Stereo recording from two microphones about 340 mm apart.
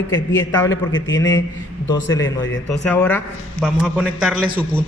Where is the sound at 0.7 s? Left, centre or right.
Left.